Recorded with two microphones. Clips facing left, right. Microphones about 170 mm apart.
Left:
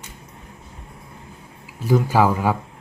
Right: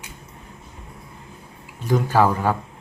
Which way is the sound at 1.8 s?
10° left (ahead or behind).